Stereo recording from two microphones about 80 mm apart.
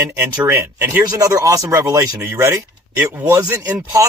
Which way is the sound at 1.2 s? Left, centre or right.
Right.